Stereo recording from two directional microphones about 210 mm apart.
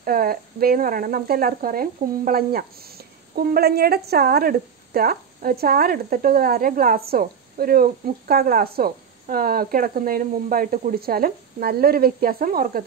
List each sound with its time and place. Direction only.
0.0 s speech: 45° right (ahead or behind)